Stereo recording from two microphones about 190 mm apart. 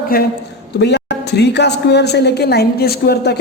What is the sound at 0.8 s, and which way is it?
A woman's voice, 60° left (ahead or behind).